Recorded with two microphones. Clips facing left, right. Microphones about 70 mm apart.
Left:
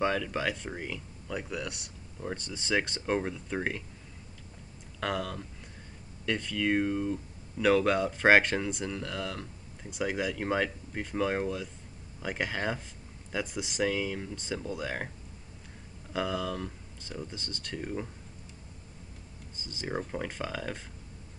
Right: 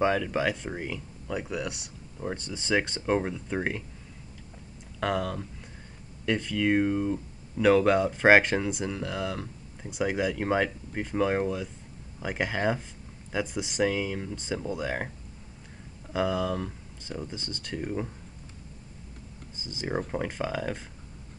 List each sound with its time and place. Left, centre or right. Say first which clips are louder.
0.0 s speech: right 4 dB; centre
5.0 s speech: right 4 dB; centre
16.1 s speech: right 4 dB; centre
19.5 s speech: right 4 dB; centre
20.0 s speech: right 5 dB; centre